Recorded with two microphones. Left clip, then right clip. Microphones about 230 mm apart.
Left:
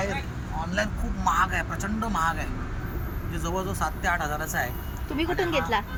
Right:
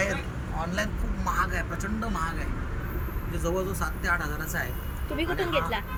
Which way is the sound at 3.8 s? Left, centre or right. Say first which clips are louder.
Left 5 dB; centre.